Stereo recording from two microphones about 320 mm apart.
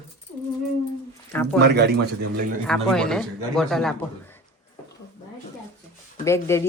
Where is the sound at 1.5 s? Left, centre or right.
Right.